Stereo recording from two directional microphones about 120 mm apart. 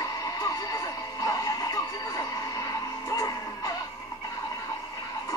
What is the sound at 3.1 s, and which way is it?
Music, 30° left (ahead or behind).